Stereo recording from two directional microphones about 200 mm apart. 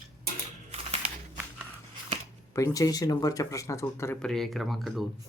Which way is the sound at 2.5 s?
15° left (ahead or behind).